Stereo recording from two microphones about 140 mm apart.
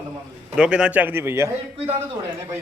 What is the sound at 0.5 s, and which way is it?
Speech, 5° right (ahead or behind).